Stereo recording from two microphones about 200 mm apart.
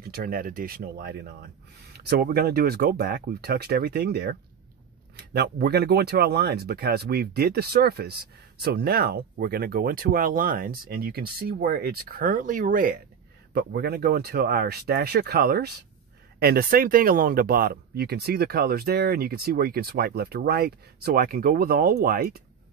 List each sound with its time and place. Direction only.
0.0 s speech: 45° right (ahead or behind)
13.5 s speech: 55° right (ahead or behind)